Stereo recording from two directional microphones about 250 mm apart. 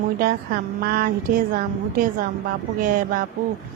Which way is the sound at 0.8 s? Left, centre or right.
Right.